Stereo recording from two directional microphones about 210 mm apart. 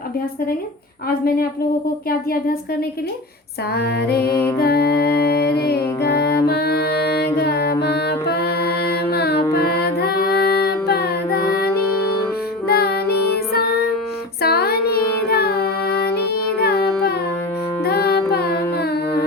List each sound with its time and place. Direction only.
2.0 s music: 45° left (ahead or behind)
3.8 s music: 50° left (ahead or behind)
9.6 s child singing: 50° left (ahead or behind)
12.6 s music: 50° left (ahead or behind)
14.4 s child singing: 50° left (ahead or behind)
16.6 s music: 50° left (ahead or behind)